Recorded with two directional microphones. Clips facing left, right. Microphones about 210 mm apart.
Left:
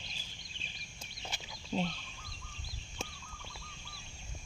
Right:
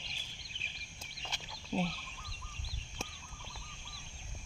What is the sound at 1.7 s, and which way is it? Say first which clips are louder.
Fowl: even; 5° right (ahead or behind).